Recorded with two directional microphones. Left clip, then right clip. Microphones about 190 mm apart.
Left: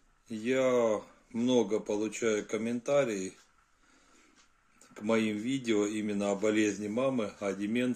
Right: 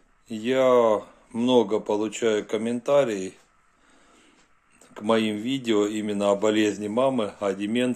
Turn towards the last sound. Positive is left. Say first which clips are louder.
# right 7 dB
turn(degrees=20)  # may be behind; listen again after turning